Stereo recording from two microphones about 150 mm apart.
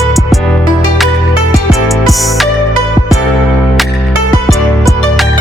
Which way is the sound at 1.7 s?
Centre (ahead or behind).